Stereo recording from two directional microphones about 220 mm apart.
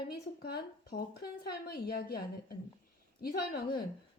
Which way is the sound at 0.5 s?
45° left (ahead or behind).